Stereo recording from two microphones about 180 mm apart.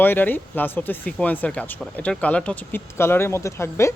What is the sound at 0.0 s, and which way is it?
Speech, 10° left (ahead or behind).